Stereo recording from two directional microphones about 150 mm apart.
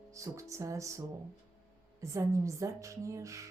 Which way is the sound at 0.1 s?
20° right (ahead or behind).